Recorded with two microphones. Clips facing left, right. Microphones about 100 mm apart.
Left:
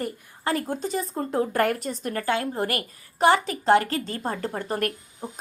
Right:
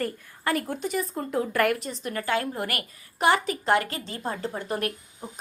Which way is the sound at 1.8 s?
45° left (ahead or behind).